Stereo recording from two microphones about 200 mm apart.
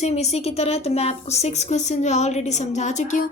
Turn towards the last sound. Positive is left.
turn(degrees=35)  # may be behind; listen again after turning